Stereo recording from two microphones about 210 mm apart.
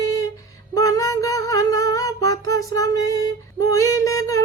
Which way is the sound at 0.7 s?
15° left (ahead or behind).